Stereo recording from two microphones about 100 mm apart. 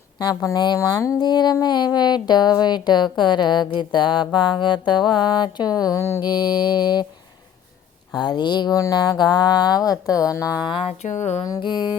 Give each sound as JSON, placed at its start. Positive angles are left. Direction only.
{"t": 0.2, "sound": "a woman's voice", "side_deg": 40}
{"t": 0.8, "sound": "speech", "side_deg": 30}
{"t": 1.2, "sound": "a woman's voice", "side_deg": 45}
{"t": 6.2, "sound": "a woman's voice", "side_deg": 45}
{"t": 8.1, "sound": "a woman's voice", "side_deg": 45}
{"t": 10.4, "sound": "a sound", "side_deg": -10}
{"t": 10.8, "sound": "a sound", "side_deg": 90}
{"t": 11.6, "sound": "a woman's voice", "side_deg": 50}